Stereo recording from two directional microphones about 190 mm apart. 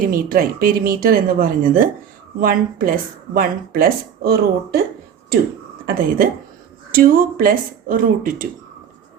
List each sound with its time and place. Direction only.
0.1 s speech: 50° right (ahead or behind)
5.8 s a woman's voice: 50° right (ahead or behind)